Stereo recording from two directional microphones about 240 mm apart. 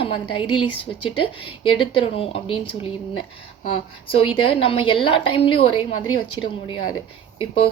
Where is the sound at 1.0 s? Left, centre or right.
Left.